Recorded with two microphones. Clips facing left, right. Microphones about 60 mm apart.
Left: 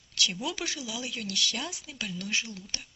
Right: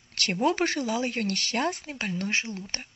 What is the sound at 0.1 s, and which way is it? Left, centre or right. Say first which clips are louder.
Speech: right 7 dB; right.